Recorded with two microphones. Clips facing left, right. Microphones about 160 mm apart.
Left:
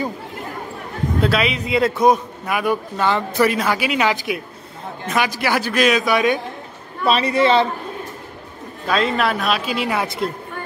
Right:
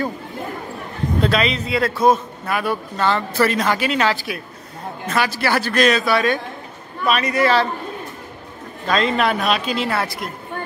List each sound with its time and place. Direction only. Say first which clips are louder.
1.2 s a man's voice: even; 5° left (ahead or behind)
7.1 s a man's voice: left 2 dB; 30° left (ahead or behind)
8.8 s speech: right 1 dB; 5° left (ahead or behind)